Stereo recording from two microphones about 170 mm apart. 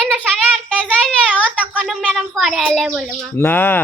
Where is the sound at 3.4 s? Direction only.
10° left (ahead or behind).